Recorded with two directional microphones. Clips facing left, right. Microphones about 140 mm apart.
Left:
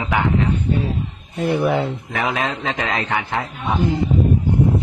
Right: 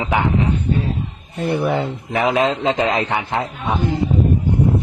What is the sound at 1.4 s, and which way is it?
Speech, centre (ahead or behind).